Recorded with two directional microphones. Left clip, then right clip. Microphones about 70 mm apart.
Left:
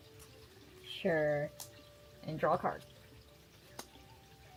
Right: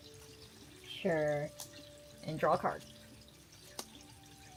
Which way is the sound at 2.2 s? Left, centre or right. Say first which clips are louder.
Right 1 dB; right.